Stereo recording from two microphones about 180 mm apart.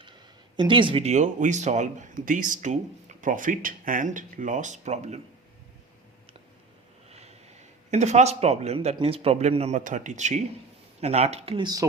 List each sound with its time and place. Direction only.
0.5 s speech: 25° right (ahead or behind)
7.1 s speech: 35° right (ahead or behind); by 11.9 s 20° right (ahead or behind)